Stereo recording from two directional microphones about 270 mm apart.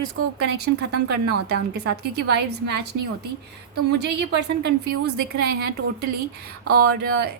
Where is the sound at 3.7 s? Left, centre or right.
Right.